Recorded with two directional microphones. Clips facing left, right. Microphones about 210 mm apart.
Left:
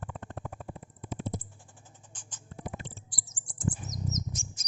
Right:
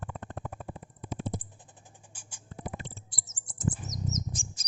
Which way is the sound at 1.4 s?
20° right (ahead or behind).